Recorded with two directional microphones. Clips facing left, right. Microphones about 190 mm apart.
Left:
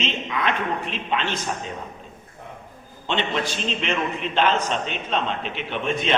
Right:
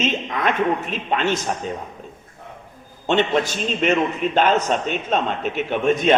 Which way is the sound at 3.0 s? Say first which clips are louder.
Right 6 dB; 45° right (ahead or behind).